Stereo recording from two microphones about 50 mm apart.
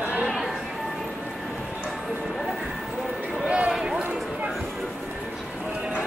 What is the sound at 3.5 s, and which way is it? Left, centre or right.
Run, right.